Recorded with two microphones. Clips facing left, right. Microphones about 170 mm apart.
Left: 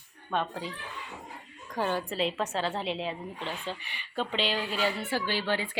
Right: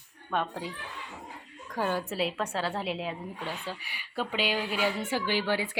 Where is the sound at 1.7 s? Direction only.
5° right (ahead or behind).